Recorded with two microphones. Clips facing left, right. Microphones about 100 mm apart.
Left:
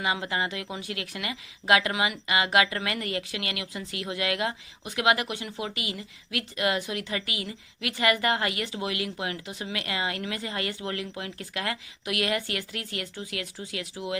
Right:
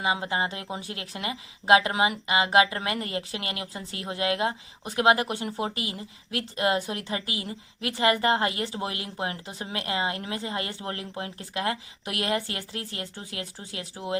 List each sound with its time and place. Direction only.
0.0 s speech: 25° right (ahead or behind)